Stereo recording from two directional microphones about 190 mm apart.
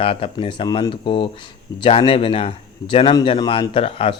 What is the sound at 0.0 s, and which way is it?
Speech, 30° left (ahead or behind).